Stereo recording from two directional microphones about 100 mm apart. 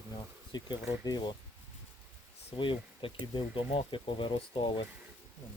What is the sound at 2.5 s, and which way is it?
Speech, 55° left (ahead or behind).